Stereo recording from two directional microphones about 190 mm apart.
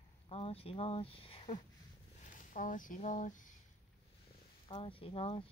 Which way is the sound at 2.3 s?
45° left (ahead or behind).